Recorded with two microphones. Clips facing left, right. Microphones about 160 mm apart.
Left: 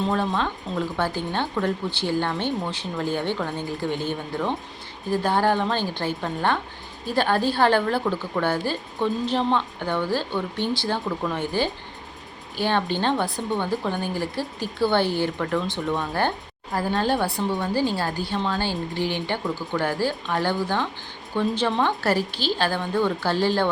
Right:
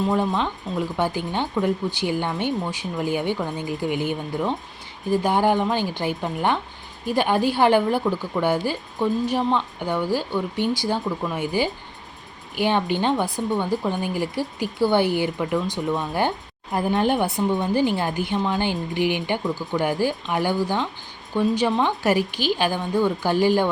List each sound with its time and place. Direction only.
0.0 s a woman's voice: 10° right (ahead or behind)